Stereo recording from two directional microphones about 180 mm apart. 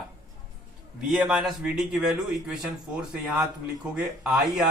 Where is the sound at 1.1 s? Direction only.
5° right (ahead or behind).